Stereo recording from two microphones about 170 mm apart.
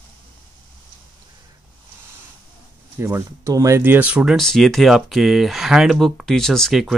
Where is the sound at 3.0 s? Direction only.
15° right (ahead or behind).